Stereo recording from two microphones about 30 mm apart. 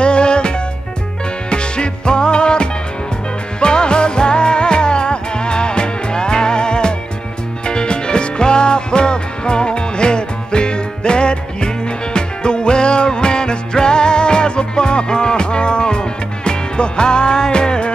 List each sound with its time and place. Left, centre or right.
0.0 s music: left